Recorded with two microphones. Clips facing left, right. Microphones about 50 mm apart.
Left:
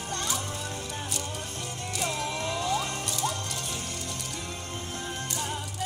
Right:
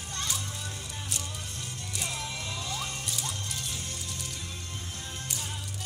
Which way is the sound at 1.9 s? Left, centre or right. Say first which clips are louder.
Left 6 dB; centre.